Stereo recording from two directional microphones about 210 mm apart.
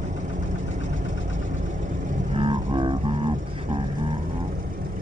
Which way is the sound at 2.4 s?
25° right (ahead or behind).